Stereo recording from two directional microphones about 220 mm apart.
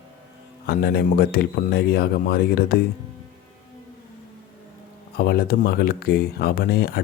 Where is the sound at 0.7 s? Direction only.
45° left (ahead or behind).